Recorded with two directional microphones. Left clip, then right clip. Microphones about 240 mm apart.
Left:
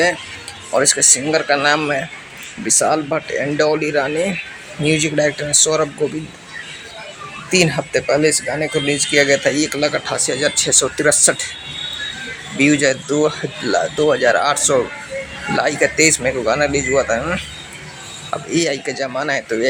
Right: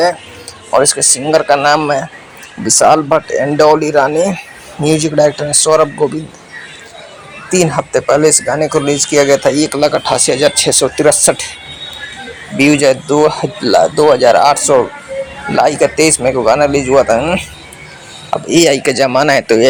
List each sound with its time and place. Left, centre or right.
0.8 s speech: centre
7.5 s speech: centre
12.5 s speech: centre
18.5 s speech: right